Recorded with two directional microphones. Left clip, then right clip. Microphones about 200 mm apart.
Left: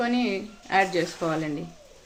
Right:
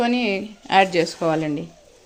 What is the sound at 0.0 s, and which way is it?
A woman's voice, 40° right (ahead or behind).